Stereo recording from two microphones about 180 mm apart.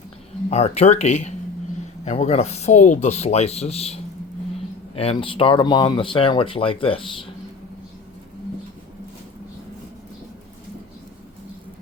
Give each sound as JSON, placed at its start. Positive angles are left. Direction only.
{"t": 0.5, "sound": "speech", "side_deg": 35}